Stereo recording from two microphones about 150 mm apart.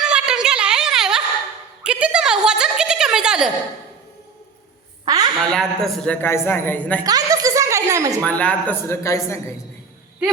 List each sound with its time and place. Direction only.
0.0 s a sound: 5° right (ahead or behind)
5.0 s a woman's voice: 25° right (ahead or behind)
5.5 s speech: 5° left (ahead or behind)
6.2 s speech: 15° left (ahead or behind)
7.0 s a woman's voice: 25° right (ahead or behind)
8.2 s speech: 10° left (ahead or behind)